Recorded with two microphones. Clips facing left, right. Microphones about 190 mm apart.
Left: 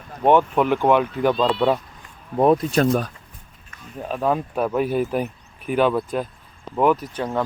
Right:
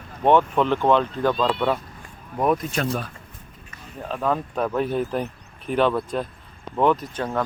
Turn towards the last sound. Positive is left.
turn(degrees=10)  # may be behind; listen again after turning